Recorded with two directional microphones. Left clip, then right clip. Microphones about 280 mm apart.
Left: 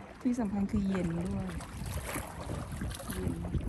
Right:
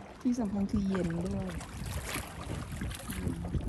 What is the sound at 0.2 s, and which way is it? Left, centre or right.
Speech, centre.